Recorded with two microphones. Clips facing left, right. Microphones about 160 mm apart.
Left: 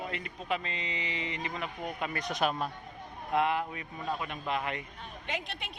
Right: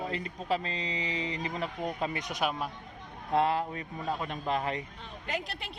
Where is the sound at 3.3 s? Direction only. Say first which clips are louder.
Right 2 dB; 35° right (ahead or behind).